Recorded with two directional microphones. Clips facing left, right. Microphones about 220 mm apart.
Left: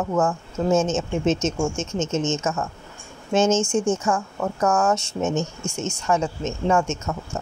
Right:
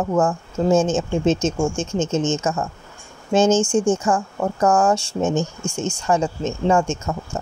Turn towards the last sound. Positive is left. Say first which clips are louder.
# right 2 dB
turn(degrees=-30)  # may be behind; listen again after turning